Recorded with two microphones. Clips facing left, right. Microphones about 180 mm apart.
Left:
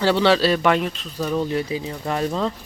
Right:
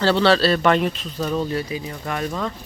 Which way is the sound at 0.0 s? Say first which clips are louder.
Even; 15° left (ahead or behind).